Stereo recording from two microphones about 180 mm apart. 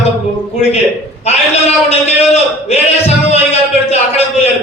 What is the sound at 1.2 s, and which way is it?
A man's voice, 35° left (ahead or behind).